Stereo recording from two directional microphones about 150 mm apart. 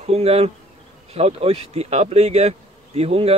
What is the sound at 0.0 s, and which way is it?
Speech, 40° right (ahead or behind).